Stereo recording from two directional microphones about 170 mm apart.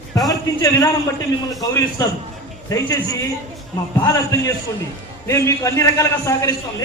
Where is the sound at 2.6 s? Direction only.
20° left (ahead or behind).